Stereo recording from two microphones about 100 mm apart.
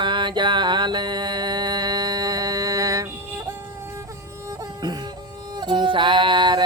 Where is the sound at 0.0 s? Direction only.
50° right (ahead or behind); by 3.1 s 35° right (ahead or behind).